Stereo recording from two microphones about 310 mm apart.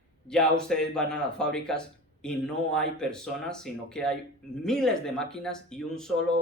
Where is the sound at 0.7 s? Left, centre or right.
Centre.